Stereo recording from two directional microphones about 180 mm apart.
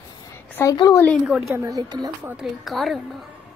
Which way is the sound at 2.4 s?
Centre (ahead or behind).